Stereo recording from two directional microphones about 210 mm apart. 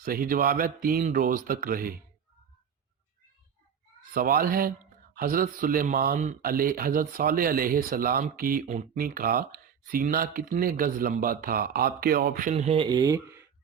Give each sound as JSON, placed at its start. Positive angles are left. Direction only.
{"t": 0.0, "sound": "speech", "side_deg": -45}
{"t": 4.1, "sound": "speech", "side_deg": -40}